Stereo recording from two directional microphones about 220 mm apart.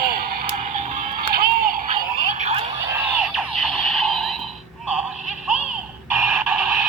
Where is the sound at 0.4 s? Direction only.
35° right (ahead or behind).